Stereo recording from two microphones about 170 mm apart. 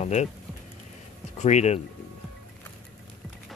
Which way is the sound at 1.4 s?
40° left (ahead or behind).